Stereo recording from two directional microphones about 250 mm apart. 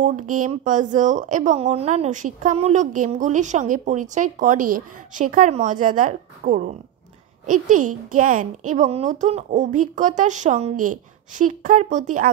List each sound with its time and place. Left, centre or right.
0.0 s a child's voice: right